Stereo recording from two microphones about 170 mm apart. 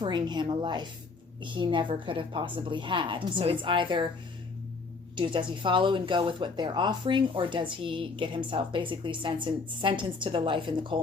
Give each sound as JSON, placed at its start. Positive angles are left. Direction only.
{"t": 0.0, "sound": "speech", "side_deg": -25}
{"t": 5.1, "sound": "speech", "side_deg": -30}